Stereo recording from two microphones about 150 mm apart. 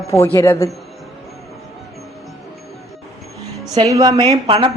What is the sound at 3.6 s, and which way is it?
A woman's voice, 25° right (ahead or behind).